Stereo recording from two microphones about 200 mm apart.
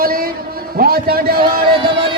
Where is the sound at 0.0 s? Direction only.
45° right (ahead or behind).